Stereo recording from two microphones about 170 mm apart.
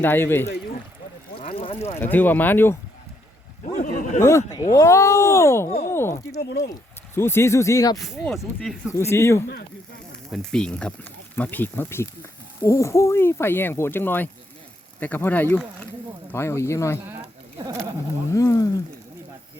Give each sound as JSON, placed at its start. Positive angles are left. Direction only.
{"t": 0.0, "sound": "speech", "side_deg": 10}
{"t": 1.4, "sound": "a sound", "side_deg": 30}
{"t": 2.0, "sound": "speech", "side_deg": 10}
{"t": 3.8, "sound": "a man's voice", "side_deg": 50}
{"t": 4.2, "sound": "speech", "side_deg": 15}
{"t": 6.4, "sound": "speech", "side_deg": 65}
{"t": 7.2, "sound": "speech", "side_deg": 15}
{"t": 7.9, "sound": "speech", "side_deg": 0}
{"t": 8.9, "sound": "speech", "side_deg": 15}
{"t": 10.3, "sound": "speech", "side_deg": 5}
{"t": 18.3, "sound": "speech", "side_deg": 20}